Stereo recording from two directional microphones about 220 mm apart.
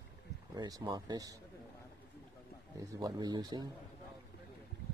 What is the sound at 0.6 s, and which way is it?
Speech, 15° right (ahead or behind).